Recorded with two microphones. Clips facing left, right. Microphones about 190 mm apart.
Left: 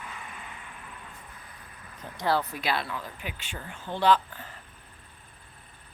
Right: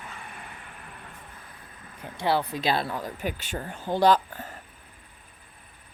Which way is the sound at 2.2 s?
15° right (ahead or behind).